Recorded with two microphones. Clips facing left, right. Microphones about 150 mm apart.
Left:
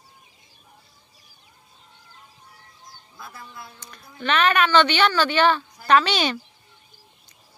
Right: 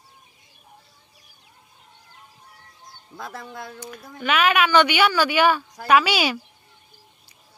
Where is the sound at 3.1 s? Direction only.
90° right.